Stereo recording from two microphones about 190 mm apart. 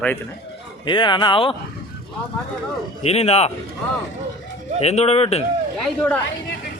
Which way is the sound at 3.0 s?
35° left (ahead or behind).